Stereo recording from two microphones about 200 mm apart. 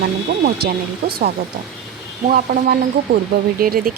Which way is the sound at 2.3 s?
45° right (ahead or behind).